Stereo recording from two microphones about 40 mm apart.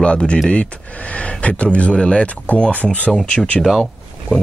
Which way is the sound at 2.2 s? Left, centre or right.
Left.